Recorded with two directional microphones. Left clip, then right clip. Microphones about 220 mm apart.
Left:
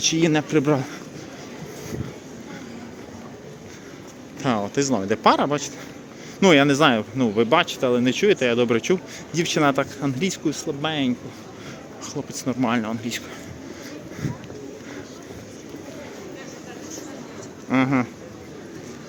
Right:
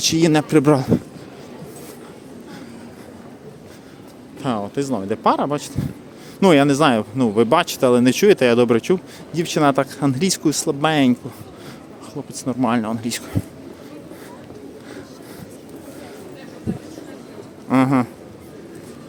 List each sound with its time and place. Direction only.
0.0 s speech: 20° right (ahead or behind)
4.4 s speech: 5° right (ahead or behind); by 11.1 s 35° right (ahead or behind)
12.1 s speech: 15° right (ahead or behind)
17.7 s a sound: 20° right (ahead or behind)